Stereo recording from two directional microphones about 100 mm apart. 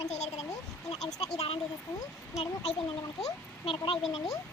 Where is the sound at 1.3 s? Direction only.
90° left.